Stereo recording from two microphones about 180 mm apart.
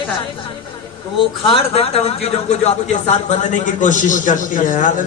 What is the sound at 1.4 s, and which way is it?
Speech, 30° left (ahead or behind).